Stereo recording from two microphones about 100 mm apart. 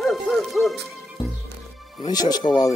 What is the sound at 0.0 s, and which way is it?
Music, centre (ahead or behind).